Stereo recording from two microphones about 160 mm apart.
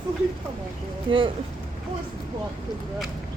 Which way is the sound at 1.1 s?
30° right (ahead or behind).